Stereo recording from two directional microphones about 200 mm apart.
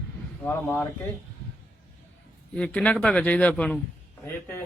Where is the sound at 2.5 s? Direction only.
5° left (ahead or behind).